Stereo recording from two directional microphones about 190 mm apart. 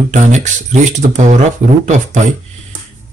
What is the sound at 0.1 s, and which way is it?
Speech, 40° right (ahead or behind).